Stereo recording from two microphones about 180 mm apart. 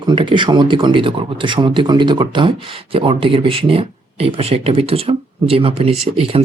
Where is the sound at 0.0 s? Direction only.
25° right (ahead or behind).